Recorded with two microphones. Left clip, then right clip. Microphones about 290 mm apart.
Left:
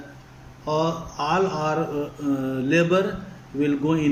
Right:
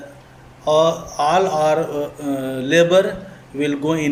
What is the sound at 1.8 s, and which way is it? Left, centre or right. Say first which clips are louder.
Mantra: right 5 dB; right.